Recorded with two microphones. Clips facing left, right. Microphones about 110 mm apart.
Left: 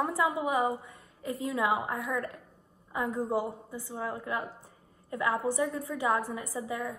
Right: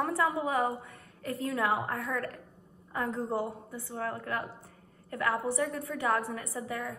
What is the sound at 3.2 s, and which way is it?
A woman's voice, 5° left (ahead or behind).